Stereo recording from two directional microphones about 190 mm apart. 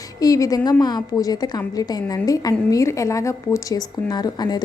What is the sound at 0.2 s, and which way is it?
A woman's voice, 20° left (ahead or behind).